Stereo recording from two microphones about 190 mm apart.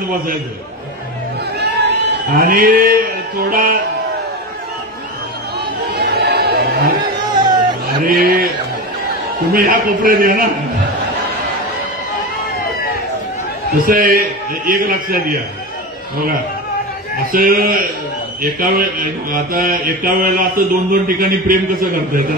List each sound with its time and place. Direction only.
1.6 s a sound: 60° right (ahead or behind)
5.9 s chatter: 60° right (ahead or behind)
7.3 s music: 25° right (ahead or behind)
8.0 s a sound: 50° right (ahead or behind)
9.5 s mantra: 45° right (ahead or behind)
13.7 s mantra: 45° right (ahead or behind)
17.3 s mantra: 50° right (ahead or behind)